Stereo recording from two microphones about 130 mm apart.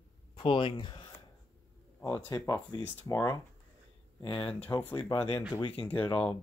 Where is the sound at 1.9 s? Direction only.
25° left (ahead or behind).